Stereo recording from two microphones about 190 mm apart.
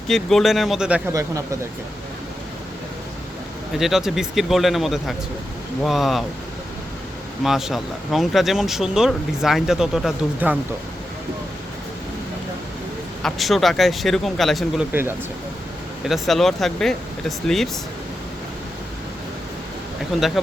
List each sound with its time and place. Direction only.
0.1 s speech: centre (ahead or behind)
1.1 s speech: 15° right (ahead or behind)
3.8 s speech: centre (ahead or behind)
7.4 s speech: centre (ahead or behind)
13.2 s speech: centre (ahead or behind)
16.0 s speech: centre (ahead or behind)
20.1 s speech: centre (ahead or behind)